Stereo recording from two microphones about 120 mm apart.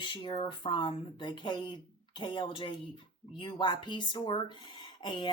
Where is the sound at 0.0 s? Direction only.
40° left (ahead or behind).